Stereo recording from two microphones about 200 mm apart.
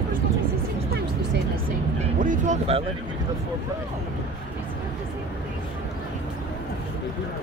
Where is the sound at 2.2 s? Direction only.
40° right (ahead or behind).